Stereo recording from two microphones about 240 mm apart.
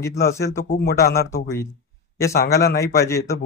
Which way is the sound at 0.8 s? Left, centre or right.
Left.